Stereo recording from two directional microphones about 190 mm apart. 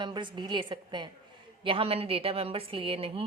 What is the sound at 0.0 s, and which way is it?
A woman's voice, 25° right (ahead or behind).